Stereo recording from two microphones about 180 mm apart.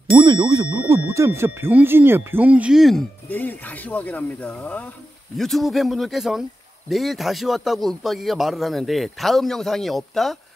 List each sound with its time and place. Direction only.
0.2 s speech: 20° right (ahead or behind); by 10.3 s centre (ahead or behind)